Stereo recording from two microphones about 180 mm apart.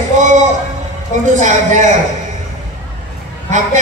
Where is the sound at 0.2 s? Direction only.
40° right (ahead or behind).